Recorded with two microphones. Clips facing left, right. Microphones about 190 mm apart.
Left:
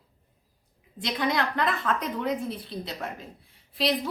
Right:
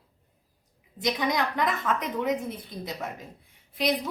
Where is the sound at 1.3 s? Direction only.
15° right (ahead or behind).